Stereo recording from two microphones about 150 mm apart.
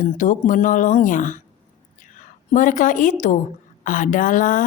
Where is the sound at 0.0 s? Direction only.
60° left (ahead or behind).